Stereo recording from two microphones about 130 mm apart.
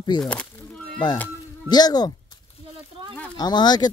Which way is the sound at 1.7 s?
30° left (ahead or behind).